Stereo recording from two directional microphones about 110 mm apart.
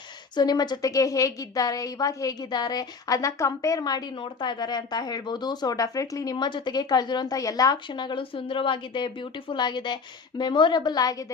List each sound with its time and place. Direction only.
0.3 s a woman's voice: 40° left (ahead or behind)
6.3 s a woman's voice: 45° left (ahead or behind)